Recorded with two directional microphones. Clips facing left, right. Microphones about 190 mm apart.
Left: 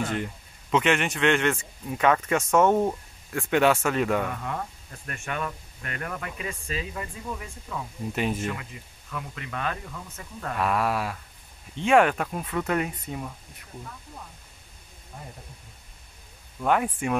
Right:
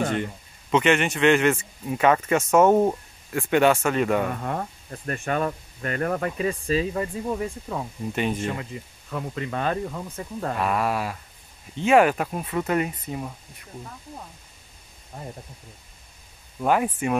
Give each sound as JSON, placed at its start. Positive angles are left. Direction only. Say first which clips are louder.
{"t": 0.1, "sound": "a man's voice", "louder": "right 3 dB", "side_deg": 0}
{"t": 4.3, "sound": "speech", "louder": "right 4 dB", "side_deg": -45}
{"t": 8.1, "sound": "a man's voice", "louder": "right 2 dB", "side_deg": 0}
{"t": 8.5, "sound": "speech", "louder": "right 3 dB", "side_deg": -35}
{"t": 10.6, "sound": "a man's voice", "louder": "even", "side_deg": 0}
{"t": 16.6, "sound": "a man's voice", "louder": "right 2 dB", "side_deg": -5}